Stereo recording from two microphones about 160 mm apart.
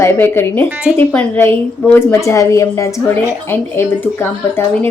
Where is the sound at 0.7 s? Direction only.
5° right (ahead or behind).